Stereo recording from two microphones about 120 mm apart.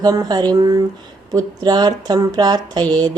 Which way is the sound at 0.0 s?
35° right (ahead or behind).